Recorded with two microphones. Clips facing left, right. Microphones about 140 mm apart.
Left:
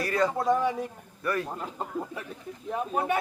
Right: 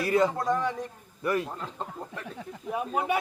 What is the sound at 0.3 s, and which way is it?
Speech, 10° left (ahead or behind).